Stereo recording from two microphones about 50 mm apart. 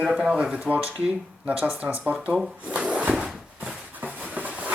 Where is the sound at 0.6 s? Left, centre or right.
Right.